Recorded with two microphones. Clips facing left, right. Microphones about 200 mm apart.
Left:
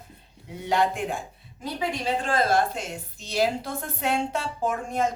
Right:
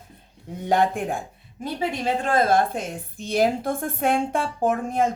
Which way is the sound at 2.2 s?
50° right (ahead or behind).